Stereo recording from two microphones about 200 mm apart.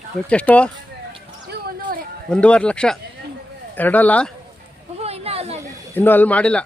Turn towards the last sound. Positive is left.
turn(degrees=5)  # may be behind; listen again after turning